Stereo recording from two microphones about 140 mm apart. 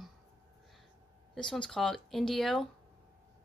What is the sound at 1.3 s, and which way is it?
Speech, 5° left (ahead or behind).